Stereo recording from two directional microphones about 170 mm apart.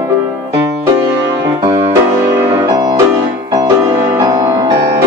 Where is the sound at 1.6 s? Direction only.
30° right (ahead or behind).